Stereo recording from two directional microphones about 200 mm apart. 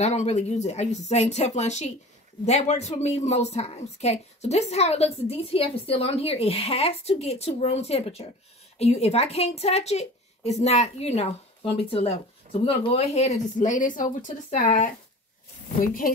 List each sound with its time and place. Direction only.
0.0 s a woman's voice: 35° left (ahead or behind)